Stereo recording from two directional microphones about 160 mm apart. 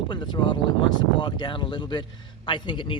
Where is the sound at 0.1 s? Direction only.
30° left (ahead or behind).